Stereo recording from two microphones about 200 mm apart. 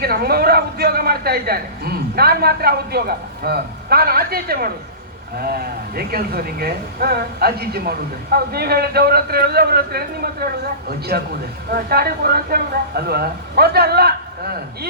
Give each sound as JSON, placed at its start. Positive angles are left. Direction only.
{"t": 0.0, "sound": "a man's voice", "side_deg": -50}